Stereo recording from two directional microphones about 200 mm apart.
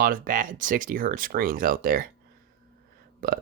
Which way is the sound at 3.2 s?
45° right (ahead or behind).